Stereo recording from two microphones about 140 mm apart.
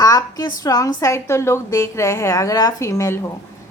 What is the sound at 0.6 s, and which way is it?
A woman's voice, 25° left (ahead or behind).